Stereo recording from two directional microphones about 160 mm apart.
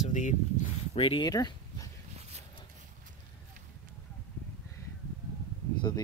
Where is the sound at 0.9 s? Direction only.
35° left (ahead or behind).